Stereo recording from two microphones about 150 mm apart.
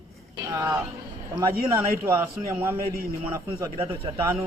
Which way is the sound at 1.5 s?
90° right.